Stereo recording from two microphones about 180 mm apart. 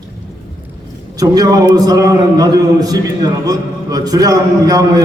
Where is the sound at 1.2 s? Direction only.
20° right (ahead or behind).